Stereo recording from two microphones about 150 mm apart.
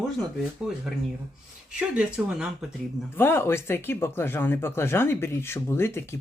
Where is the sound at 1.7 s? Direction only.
5° right (ahead or behind).